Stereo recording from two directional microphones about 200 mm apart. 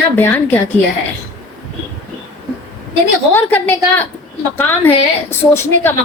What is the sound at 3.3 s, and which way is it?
A woman's voice, 10° left (ahead or behind).